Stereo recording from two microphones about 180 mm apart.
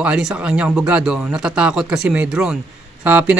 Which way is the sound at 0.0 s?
5° right (ahead or behind).